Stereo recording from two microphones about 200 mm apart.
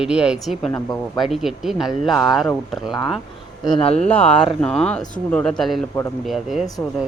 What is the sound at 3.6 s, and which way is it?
Speech, 25° left (ahead or behind).